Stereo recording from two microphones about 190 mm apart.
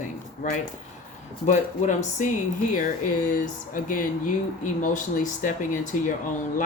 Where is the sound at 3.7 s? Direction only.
45° left (ahead or behind).